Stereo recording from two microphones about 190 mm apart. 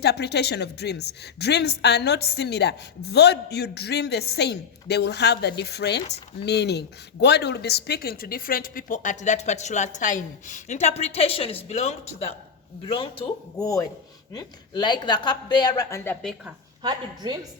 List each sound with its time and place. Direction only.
0.0 s a woman's voice: 60° left (ahead or behind); by 16.1 s 15° left (ahead or behind)
16.8 s a woman's voice: 20° right (ahead or behind)